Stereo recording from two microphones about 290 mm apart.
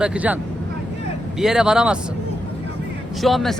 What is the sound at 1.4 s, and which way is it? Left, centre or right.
Speech, centre.